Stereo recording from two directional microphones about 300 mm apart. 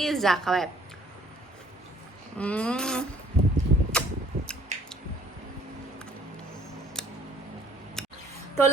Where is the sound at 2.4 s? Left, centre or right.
Centre.